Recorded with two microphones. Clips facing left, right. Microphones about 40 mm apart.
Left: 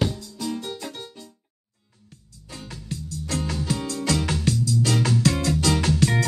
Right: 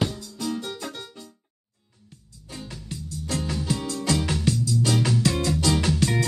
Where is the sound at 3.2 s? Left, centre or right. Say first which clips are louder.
Left 1 dB; left.